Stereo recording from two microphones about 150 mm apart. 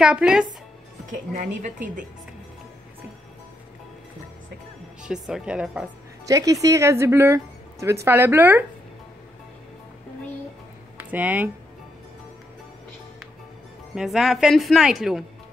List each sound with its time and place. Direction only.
0.0 s a woman's voice: 5° right (ahead or behind)
1.3 s a woman's voice: 60° right (ahead or behind)
5.0 s a woman's voice: 5° right (ahead or behind)
6.2 s speech: 20° right (ahead or behind)
11.1 s speech: 10° right (ahead or behind)
13.9 s a woman's voice: centre (ahead or behind)